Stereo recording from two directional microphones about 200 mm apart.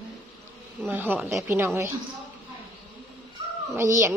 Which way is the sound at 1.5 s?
15° right (ahead or behind).